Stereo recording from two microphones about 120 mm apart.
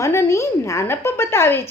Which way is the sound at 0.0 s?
25° left (ahead or behind).